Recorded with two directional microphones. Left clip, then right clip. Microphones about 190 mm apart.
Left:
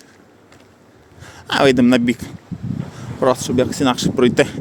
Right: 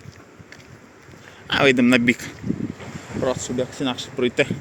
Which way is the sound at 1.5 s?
30° left (ahead or behind).